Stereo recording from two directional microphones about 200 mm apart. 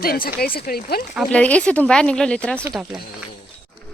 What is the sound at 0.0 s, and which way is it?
Speech, 50° left (ahead or behind).